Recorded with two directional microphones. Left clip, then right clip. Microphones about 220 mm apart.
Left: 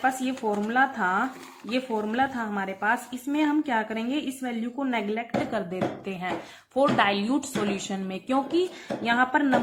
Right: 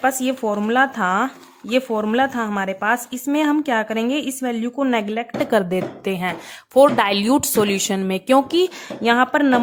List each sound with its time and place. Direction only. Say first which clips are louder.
0.0 s speech: right 6 dB; 50° right (ahead or behind)